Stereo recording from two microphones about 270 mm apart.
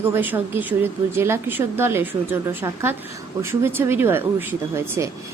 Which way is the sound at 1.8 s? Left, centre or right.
Centre.